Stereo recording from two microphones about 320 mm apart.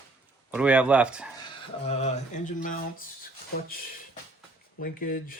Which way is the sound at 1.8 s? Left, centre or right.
Centre.